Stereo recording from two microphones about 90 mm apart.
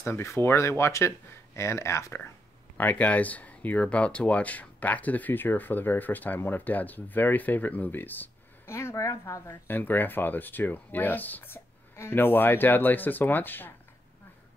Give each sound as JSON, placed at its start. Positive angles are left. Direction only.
{"t": 0.0, "sound": "speech", "side_deg": 30}
{"t": 2.8, "sound": "speech", "side_deg": 15}
{"t": 9.5, "sound": "speech", "side_deg": 20}